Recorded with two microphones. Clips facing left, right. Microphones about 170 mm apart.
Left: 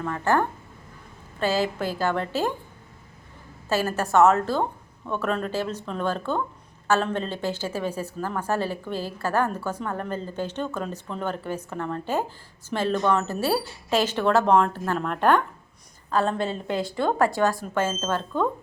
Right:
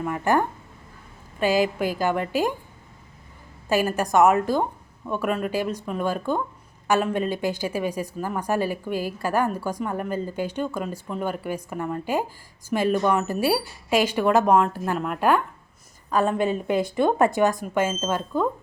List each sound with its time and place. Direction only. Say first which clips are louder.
0.0 s a woman's voice: right 1 dB; 15° right (ahead or behind)
3.7 s a woman's voice: right 2 dB; 15° right (ahead or behind)